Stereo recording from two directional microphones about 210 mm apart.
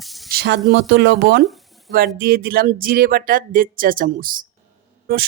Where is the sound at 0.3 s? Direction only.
50° right (ahead or behind).